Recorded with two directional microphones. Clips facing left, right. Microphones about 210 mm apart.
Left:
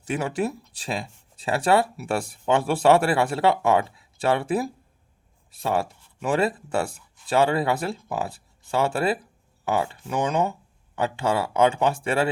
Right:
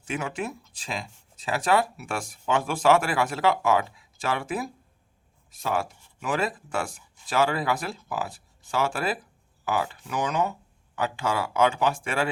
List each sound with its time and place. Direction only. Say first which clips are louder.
0.1 s speech: left 5 dB; 35° left (ahead or behind)
6.2 s speech: left 5 dB; 30° left (ahead or behind)